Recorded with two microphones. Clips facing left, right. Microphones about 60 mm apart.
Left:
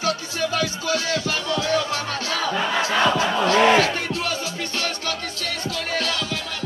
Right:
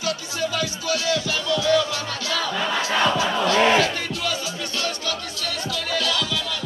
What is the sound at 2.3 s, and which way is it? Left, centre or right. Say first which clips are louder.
Crowd: left 1 dB; left.